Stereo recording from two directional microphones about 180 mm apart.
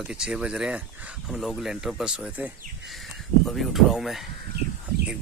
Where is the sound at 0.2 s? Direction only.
5° right (ahead or behind).